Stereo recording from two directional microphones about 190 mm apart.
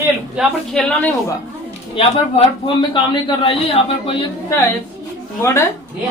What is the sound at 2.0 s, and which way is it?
A man's voice, 30° left (ahead or behind).